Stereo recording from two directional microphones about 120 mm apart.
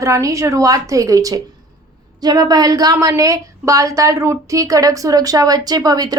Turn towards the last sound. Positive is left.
turn(degrees=-35)  # may be behind; listen again after turning